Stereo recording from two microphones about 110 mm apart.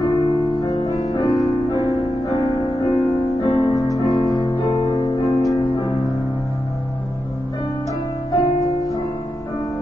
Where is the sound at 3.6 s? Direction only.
35° left (ahead or behind).